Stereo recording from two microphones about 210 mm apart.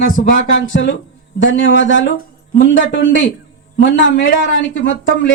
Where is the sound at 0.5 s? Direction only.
60° left (ahead or behind).